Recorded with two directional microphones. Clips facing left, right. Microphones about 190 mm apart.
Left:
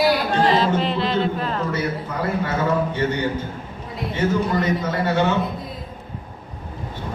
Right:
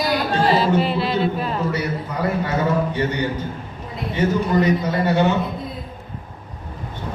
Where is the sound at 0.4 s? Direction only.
10° right (ahead or behind).